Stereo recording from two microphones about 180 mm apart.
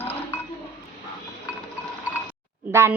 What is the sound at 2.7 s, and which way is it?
Speech, 15° right (ahead or behind).